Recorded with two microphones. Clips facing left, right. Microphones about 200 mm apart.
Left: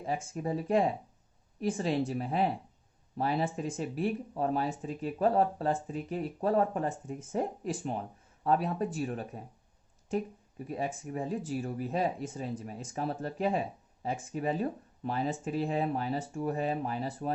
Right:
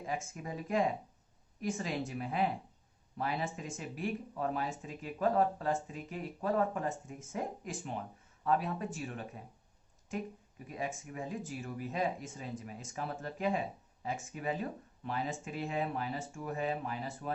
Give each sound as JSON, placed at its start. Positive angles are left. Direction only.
{"t": 0.0, "sound": "speech", "side_deg": 35}
{"t": 10.7, "sound": "speech", "side_deg": 35}